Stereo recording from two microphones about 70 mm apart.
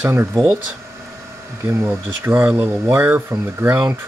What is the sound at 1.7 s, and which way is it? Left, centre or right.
Speech, right.